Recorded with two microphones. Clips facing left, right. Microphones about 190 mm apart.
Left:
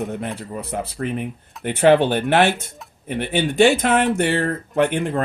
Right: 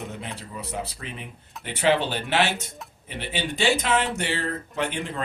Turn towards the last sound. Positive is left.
turn(degrees=55)  # may be behind; listen again after turning